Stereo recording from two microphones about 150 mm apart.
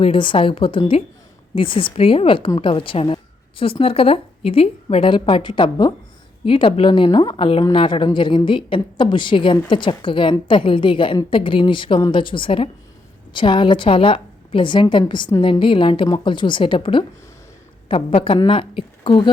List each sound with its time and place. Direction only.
0.0 s a woman's voice: 35° left (ahead or behind)